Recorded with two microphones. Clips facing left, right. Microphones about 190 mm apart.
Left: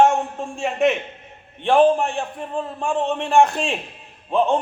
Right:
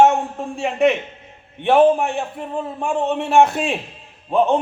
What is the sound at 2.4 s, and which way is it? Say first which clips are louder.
A man's voice: right 1 dB; 10° right (ahead or behind).